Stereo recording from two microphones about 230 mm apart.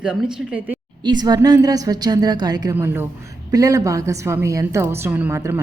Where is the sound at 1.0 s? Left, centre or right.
Centre.